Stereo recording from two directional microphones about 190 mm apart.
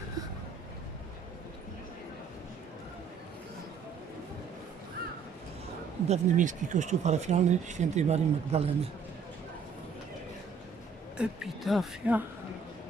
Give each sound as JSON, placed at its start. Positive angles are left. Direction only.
{"t": 6.1, "sound": "speech", "side_deg": -40}
{"t": 11.2, "sound": "a woman's voice", "side_deg": 0}